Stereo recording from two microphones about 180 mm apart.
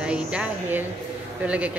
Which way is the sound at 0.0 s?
5° right (ahead or behind).